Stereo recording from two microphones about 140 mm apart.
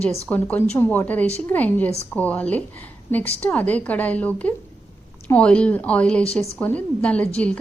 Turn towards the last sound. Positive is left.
turn(degrees=10)  # may be behind; listen again after turning